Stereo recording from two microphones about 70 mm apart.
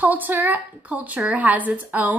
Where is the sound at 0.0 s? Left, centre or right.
Right.